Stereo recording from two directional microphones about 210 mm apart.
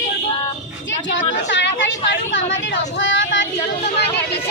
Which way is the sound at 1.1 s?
60° left (ahead or behind).